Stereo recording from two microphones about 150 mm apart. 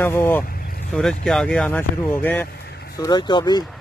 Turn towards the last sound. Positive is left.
turn(degrees=25)  # may be behind; listen again after turning